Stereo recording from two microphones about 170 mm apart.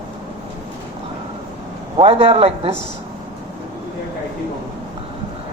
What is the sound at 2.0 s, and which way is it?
Speech, 35° right (ahead or behind).